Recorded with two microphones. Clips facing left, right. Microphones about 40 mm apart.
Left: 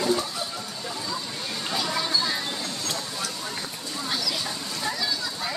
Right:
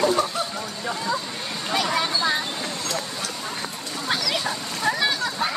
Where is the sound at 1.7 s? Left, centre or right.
Right.